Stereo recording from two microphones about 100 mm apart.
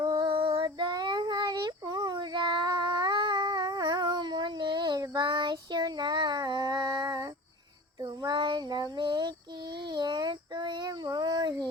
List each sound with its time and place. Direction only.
0.0 s child singing: 40° right (ahead or behind)